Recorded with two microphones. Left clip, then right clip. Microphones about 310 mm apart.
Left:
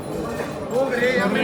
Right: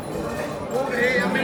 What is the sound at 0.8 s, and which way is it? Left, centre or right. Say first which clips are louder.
Basketball bounce: left 2 dB; centre.